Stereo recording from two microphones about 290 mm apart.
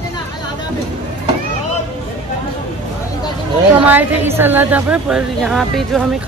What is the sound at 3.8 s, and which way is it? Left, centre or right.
A woman's voice, centre.